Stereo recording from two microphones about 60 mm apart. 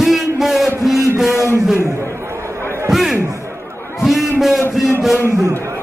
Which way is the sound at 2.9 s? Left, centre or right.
Centre.